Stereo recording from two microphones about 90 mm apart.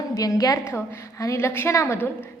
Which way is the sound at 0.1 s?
40° left (ahead or behind).